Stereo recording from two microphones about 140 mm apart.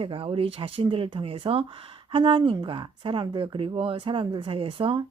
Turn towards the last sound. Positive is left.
turn(degrees=-35)  # may be behind; listen again after turning